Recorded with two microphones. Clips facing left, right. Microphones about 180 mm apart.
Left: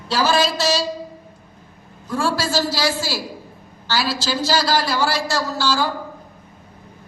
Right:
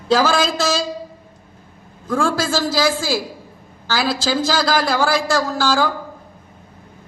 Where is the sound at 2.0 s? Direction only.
50° right (ahead or behind).